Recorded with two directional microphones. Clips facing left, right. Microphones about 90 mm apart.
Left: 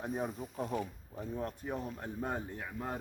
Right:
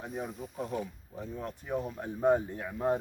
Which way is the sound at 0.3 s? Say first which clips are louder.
Right 1 dB; centre (ahead or behind).